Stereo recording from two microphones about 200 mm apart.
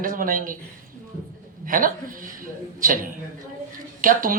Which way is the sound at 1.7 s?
45° right (ahead or behind).